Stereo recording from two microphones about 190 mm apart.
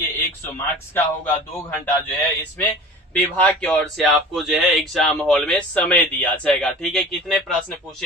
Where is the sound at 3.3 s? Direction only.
5° left (ahead or behind).